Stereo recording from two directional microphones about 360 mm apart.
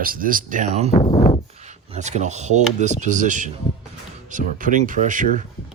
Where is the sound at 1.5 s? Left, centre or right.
Centre.